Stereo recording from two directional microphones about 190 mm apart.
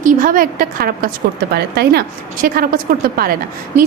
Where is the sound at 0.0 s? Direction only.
45° right (ahead or behind).